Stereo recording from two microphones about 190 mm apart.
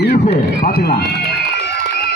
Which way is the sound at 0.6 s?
55° left (ahead or behind).